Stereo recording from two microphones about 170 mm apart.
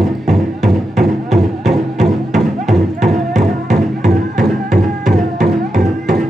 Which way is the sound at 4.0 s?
50° right (ahead or behind).